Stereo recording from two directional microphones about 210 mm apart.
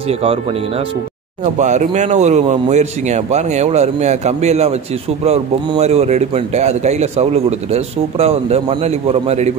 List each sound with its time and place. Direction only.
1.4 s speech: 35° right (ahead or behind)